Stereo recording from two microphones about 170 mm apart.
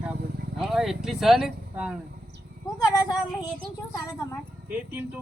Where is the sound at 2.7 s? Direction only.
25° left (ahead or behind).